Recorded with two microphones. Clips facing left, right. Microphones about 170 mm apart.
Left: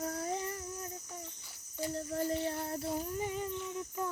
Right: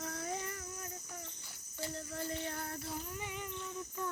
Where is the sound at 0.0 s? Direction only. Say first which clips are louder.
Left 5 dB; 35° left (ahead or behind).